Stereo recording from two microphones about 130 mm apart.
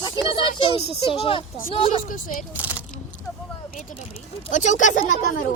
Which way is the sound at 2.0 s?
90° left.